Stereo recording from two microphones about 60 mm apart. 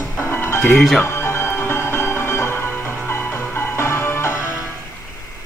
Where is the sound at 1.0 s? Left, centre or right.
Left.